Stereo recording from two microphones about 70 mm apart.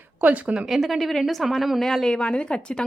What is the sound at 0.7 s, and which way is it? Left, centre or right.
Speech, centre.